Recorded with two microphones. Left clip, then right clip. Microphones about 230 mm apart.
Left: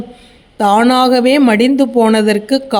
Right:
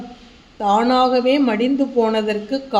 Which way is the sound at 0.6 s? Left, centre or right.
Left.